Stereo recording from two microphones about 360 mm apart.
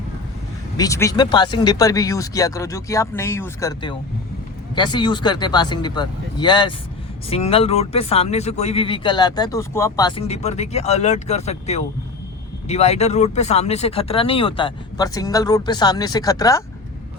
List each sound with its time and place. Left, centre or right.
0.8 s speech: centre